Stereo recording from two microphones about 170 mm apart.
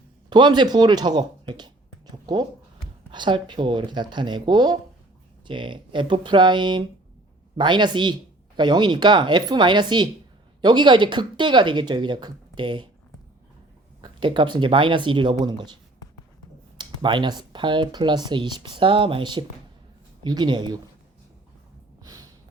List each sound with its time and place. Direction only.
0.3 s speech: 25° right (ahead or behind)
14.0 s speech: 30° right (ahead or behind)
22.0 s snort: 20° right (ahead or behind)